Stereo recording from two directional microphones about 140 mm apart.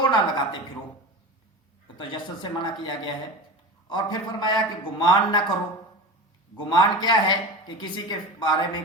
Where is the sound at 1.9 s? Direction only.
35° left (ahead or behind).